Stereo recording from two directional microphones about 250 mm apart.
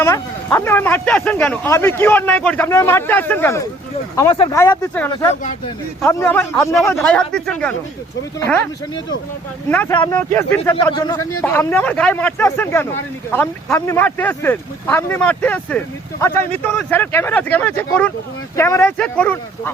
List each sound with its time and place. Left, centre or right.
0.0 s speech: centre
5.3 s speech: left
6.0 s speech: centre
9.6 s speech: centre